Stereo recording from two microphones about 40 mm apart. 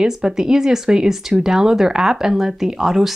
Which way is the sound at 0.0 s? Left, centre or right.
Centre.